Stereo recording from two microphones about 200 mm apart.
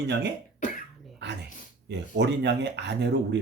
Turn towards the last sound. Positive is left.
turn(degrees=-60)  # may be behind; listen again after turning